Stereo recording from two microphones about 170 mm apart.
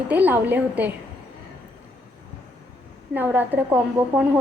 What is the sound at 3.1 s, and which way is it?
Speech, 10° right (ahead or behind).